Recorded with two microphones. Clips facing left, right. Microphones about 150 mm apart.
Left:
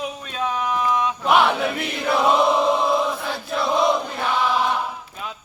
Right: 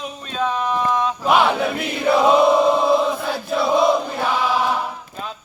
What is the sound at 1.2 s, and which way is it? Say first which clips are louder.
Chant: right 1 dB; centre (ahead or behind).